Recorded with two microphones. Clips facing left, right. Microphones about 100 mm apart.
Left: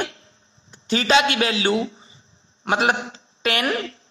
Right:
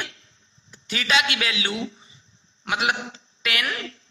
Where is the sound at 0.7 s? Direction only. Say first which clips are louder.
Left 6 dB; 30° left (ahead or behind).